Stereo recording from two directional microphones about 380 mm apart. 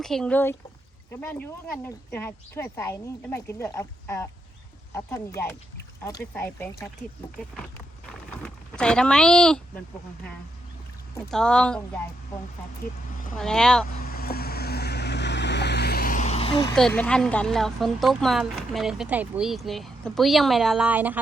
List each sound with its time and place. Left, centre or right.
0.0 s speech: centre
8.4 s speech: centre
11.3 s speech: centre
13.3 s speech: centre
14.0 s vehicle: left
16.7 s speech: centre